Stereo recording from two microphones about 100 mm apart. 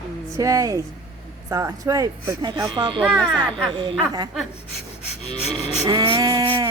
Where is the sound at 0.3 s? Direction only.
35° right (ahead or behind).